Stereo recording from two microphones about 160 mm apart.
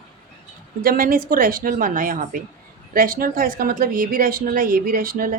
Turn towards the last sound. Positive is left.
turn(degrees=-60)  # may be behind; listen again after turning